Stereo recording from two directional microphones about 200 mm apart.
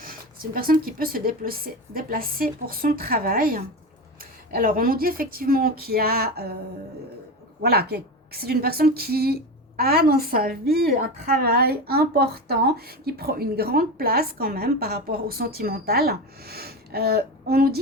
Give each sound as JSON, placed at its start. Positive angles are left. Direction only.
{"t": 0.0, "sound": "a woman's voice", "side_deg": -45}
{"t": 7.6, "sound": "a woman's voice", "side_deg": -50}